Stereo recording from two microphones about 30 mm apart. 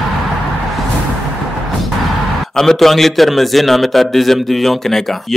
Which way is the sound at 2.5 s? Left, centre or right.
Centre.